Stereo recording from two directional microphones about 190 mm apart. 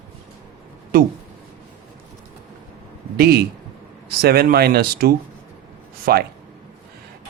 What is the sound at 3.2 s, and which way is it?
A man's voice, 55° right (ahead or behind).